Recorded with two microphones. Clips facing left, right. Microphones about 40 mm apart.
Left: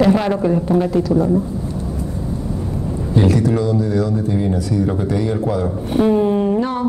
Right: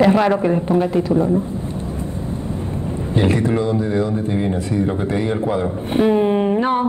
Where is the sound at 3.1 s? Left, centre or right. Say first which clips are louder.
Left 2 dB; right.